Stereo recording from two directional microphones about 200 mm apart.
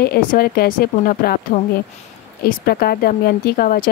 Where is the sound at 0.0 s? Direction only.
50° left (ahead or behind).